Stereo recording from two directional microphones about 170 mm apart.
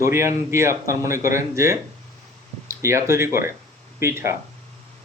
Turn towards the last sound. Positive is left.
turn(degrees=-15)  # may be behind; listen again after turning